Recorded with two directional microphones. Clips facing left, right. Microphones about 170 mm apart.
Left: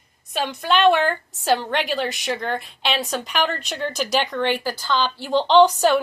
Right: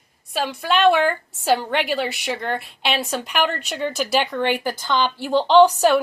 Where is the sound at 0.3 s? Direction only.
5° right (ahead or behind).